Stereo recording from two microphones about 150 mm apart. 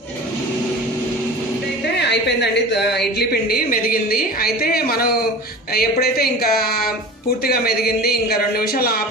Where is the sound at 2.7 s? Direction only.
90° left.